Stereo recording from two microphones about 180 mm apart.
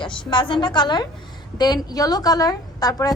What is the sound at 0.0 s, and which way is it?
A woman's voice, 25° left (ahead or behind).